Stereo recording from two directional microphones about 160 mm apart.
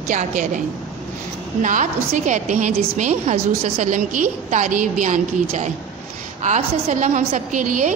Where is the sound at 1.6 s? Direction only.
50° right (ahead or behind).